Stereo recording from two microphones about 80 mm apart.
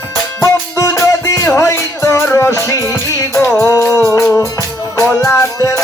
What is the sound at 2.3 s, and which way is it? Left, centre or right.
Music, left.